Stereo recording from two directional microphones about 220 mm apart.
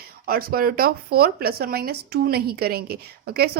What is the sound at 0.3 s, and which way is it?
Speech, 40° right (ahead or behind).